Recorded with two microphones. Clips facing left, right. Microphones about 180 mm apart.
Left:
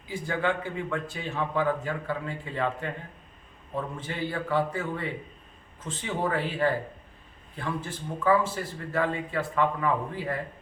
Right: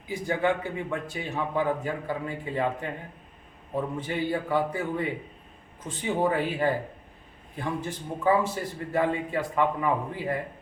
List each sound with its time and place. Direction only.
0.1 s a man's voice: 15° right (ahead or behind)